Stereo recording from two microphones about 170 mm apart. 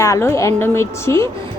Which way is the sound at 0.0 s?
20° left (ahead or behind).